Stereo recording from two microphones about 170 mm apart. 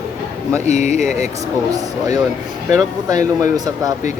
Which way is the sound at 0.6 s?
45° left (ahead or behind).